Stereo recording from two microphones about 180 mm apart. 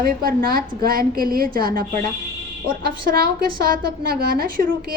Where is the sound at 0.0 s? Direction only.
55° right (ahead or behind).